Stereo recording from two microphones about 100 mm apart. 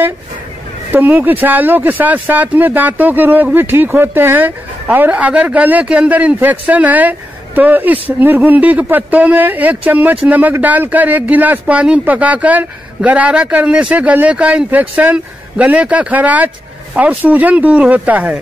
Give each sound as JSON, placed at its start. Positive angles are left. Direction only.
{"t": 0.9, "sound": "speech", "side_deg": -20}